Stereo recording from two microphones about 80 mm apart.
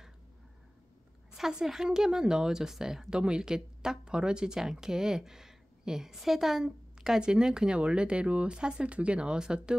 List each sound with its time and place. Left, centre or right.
1.3 s speech: centre